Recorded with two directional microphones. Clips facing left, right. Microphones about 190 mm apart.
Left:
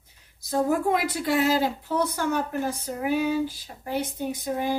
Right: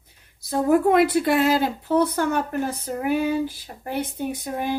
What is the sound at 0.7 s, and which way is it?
A woman's voice, 60° right (ahead or behind).